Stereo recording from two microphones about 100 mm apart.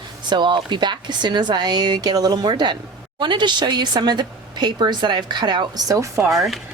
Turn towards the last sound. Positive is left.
turn(degrees=0)  # may be behind; listen again after turning